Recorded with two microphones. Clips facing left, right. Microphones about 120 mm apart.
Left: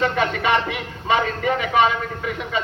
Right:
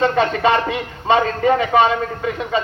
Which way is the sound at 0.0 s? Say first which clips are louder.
Right 5 dB; 30° right (ahead or behind).